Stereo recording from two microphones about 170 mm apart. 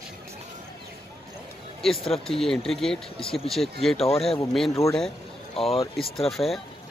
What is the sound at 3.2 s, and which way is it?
Speech, 30° left (ahead or behind).